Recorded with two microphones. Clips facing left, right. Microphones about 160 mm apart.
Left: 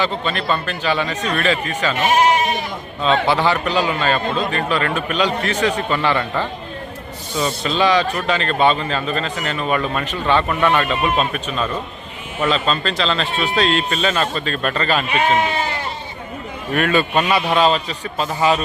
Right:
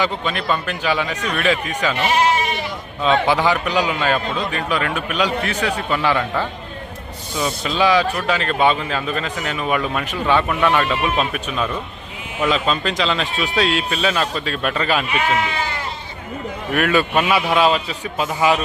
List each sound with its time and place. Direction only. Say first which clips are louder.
0.0 s a man's voice: even; 10° right (ahead or behind)
2.0 s sheep: left 3 dB; 45° left (ahead or behind)
3.0 s a man's voice: even; 10° right (ahead or behind)
15.2 s speech: left 3 dB; 25° left (ahead or behind)
16.7 s a man's voice: even; 5° right (ahead or behind)